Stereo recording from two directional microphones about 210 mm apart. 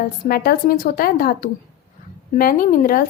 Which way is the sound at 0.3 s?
45° left (ahead or behind).